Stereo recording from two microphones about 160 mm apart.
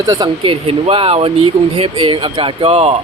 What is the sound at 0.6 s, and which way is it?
Speech, 35° right (ahead or behind).